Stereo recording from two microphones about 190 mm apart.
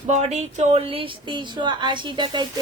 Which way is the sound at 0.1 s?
35° right (ahead or behind).